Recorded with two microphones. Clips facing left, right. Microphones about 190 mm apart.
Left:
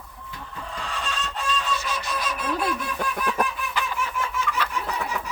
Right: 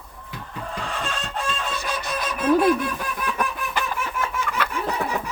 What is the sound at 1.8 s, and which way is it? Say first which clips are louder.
Honk: right 2 dB; 55° right (ahead or behind).